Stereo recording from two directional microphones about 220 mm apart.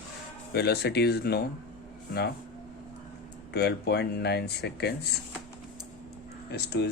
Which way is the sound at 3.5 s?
50° left (ahead or behind).